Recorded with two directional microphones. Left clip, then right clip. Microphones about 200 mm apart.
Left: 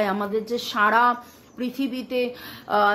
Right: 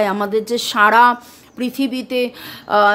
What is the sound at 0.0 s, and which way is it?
Speech, 30° right (ahead or behind).